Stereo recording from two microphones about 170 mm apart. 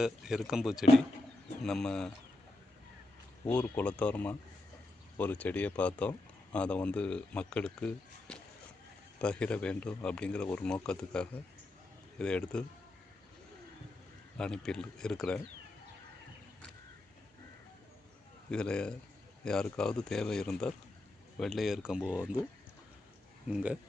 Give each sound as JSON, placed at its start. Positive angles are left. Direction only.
{"t": 0.0, "sound": "speech", "side_deg": 0}
{"t": 3.4, "sound": "speech", "side_deg": 10}
{"t": 14.3, "sound": "speech", "side_deg": 5}
{"t": 18.5, "sound": "speech", "side_deg": 5}
{"t": 23.5, "sound": "speech", "side_deg": -5}